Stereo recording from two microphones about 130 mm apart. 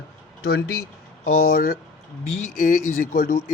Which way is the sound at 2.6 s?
90° left.